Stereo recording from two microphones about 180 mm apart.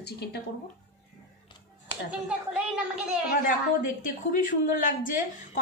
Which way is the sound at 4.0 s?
50° left (ahead or behind).